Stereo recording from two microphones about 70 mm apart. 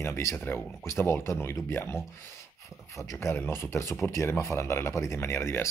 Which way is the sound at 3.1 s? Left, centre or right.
Left.